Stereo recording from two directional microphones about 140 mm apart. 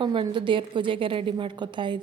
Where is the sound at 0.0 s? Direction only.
35° right (ahead or behind).